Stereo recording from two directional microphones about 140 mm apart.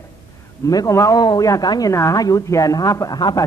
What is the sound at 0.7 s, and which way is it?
A man's voice, 25° left (ahead or behind).